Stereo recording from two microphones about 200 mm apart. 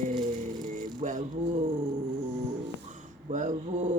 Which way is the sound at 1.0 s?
40° right (ahead or behind).